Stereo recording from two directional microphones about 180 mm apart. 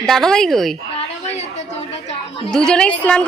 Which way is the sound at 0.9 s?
35° left (ahead or behind).